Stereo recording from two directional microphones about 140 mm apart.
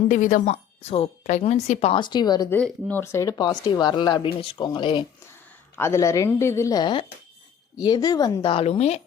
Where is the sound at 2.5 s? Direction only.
10° left (ahead or behind); by 5.0 s 35° left (ahead or behind).